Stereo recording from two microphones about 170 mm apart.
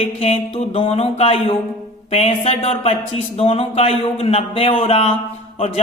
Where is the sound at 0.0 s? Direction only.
35° left (ahead or behind).